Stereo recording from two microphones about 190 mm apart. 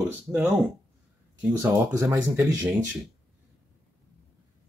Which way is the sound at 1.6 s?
10° right (ahead or behind).